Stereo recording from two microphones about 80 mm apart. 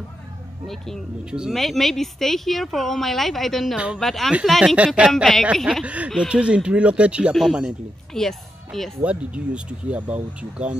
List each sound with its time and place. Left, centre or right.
0.7 s speech: centre
3.7 s speech: centre
4.0 s speech: centre
5.1 s speech: centre
5.9 s speech: centre
8.1 s speech: centre
9.0 s speech: centre